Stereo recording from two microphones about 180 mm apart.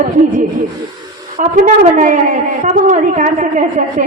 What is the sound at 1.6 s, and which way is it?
A woman's voice, 45° right (ahead or behind).